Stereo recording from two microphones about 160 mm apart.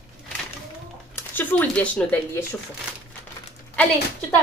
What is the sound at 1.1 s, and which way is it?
Speech, 10° left (ahead or behind).